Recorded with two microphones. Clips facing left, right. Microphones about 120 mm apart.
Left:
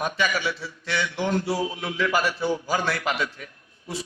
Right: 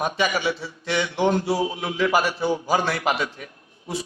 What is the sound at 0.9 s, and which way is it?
A man's voice, 25° right (ahead or behind).